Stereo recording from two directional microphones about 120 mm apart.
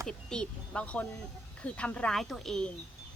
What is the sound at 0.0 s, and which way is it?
Speech, 5° left (ahead or behind).